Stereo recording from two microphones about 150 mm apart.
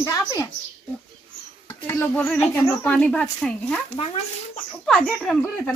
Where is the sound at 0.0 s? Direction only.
25° left (ahead or behind).